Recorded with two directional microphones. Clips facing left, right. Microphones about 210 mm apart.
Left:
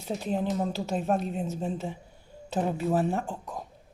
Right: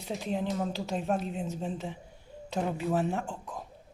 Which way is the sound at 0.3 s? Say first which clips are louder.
Left 3 dB; 50° left (ahead or behind).